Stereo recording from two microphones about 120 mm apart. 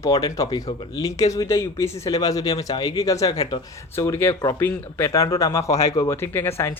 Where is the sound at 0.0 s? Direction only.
30° left (ahead or behind).